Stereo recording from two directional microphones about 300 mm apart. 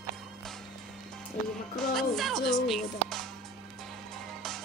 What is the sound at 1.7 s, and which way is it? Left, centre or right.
Speech, centre.